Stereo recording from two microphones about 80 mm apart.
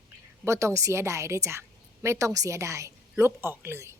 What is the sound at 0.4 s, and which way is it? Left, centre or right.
A woman's voice, right.